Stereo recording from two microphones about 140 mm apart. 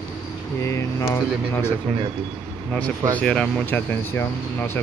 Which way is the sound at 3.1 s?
10° left (ahead or behind).